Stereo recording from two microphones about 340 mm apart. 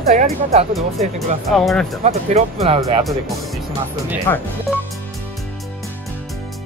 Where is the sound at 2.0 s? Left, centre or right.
Centre.